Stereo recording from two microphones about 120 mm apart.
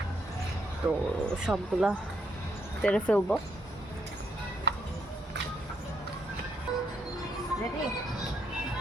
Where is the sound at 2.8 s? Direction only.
10° left (ahead or behind).